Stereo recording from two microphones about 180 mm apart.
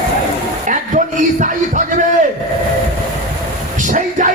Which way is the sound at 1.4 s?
45° right (ahead or behind).